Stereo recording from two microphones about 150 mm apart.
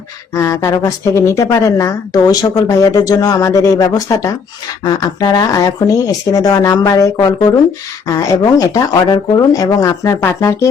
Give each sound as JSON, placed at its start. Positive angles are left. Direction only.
{"t": 0.3, "sound": "speech", "side_deg": 20}